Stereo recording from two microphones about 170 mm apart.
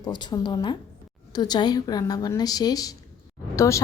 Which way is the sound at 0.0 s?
25° left (ahead or behind).